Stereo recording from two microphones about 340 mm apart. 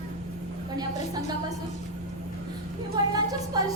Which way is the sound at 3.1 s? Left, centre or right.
Centre.